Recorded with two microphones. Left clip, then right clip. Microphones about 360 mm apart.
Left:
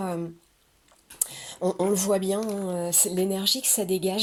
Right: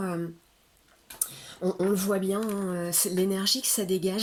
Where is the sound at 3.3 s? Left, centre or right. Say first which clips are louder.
Left 2 dB; centre.